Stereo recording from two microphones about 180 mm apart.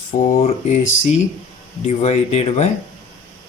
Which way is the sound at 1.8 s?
35° left (ahead or behind).